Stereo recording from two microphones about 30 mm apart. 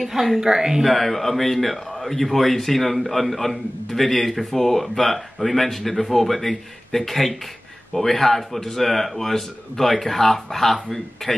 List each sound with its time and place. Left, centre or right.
0.0 s speech: centre
0.4 s speech: centre
0.8 s speech: centre